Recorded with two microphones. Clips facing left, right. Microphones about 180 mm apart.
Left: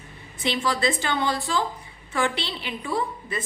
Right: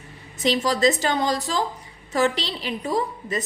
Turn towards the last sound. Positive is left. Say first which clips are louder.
# right 3 dB
turn(degrees=-40)  # may be behind; listen again after turning